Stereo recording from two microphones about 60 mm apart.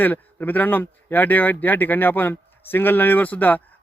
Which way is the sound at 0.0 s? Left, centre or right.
Left.